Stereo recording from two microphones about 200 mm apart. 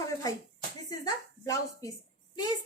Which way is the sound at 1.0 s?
15° left (ahead or behind).